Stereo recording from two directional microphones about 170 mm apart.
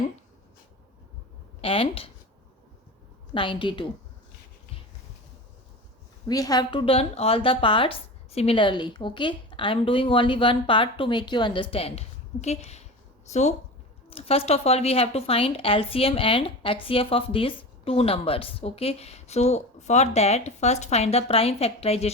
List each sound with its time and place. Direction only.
1.6 s speech: 35° left (ahead or behind)
3.3 s a woman's voice: 30° left (ahead or behind)
6.2 s a woman's voice: 20° left (ahead or behind); by 22.1 s 35° left (ahead or behind)